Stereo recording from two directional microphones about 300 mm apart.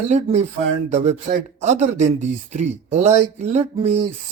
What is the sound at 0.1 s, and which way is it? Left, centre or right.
Speech, right.